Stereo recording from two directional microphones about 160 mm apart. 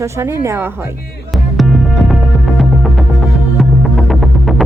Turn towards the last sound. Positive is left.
turn(degrees=0)  # may be behind; listen again after turning